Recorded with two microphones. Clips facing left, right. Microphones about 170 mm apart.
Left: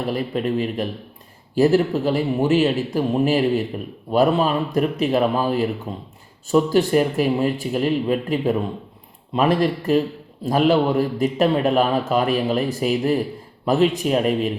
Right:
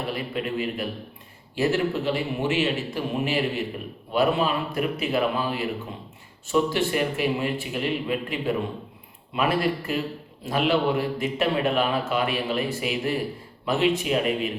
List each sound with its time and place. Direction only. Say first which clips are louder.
0.1 s speech: left 6 dB; 40° left (ahead or behind)